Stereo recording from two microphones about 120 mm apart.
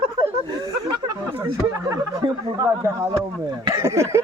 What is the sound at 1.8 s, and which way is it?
Speech, 30° right (ahead or behind).